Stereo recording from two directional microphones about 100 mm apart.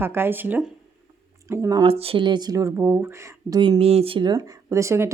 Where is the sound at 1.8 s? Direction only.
70° right (ahead or behind).